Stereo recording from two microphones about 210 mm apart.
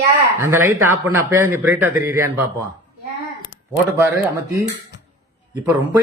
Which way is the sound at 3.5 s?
70° left (ahead or behind).